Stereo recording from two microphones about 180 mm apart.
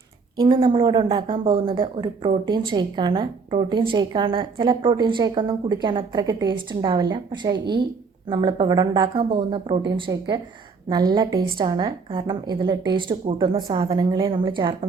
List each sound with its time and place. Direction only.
0.3 s a woman's voice: 25° right (ahead or behind)